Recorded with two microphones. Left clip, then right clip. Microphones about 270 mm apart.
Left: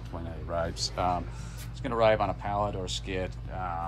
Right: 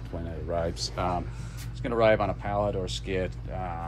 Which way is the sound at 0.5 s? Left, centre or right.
Left.